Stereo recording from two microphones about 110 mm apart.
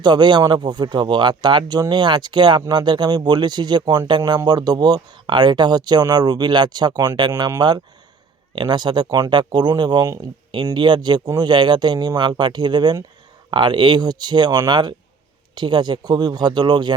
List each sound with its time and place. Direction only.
0.0 s speech: 40° right (ahead or behind)
8.5 s speech: 40° right (ahead or behind)